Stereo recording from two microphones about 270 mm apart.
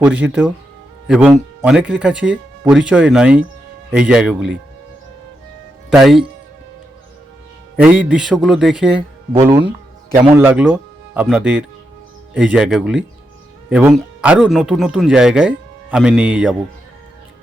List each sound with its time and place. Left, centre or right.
0.0 s speech: centre
5.9 s speech: centre
7.8 s speech: centre